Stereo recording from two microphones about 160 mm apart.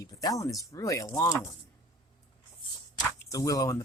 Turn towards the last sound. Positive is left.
turn(degrees=20)  # may be behind; listen again after turning